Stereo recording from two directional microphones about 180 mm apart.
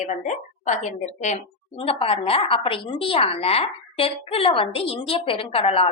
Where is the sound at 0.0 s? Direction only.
40° left (ahead or behind).